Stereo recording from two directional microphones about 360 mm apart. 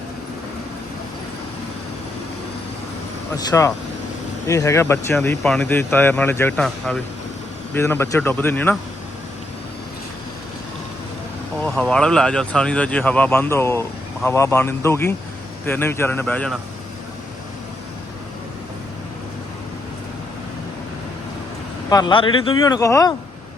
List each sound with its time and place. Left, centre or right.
3.3 s speech: centre
11.6 s speech: centre
21.8 s speech: centre